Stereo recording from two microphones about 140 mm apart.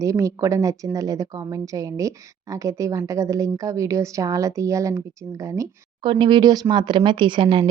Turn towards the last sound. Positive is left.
turn(degrees=-40)  # may be behind; listen again after turning